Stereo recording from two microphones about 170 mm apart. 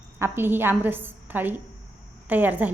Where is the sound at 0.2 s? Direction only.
15° right (ahead or behind).